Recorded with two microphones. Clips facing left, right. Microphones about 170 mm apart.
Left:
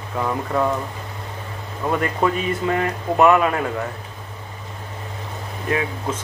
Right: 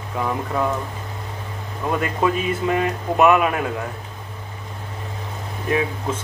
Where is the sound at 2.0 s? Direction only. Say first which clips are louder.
Right 1 dB; 20° right (ahead or behind).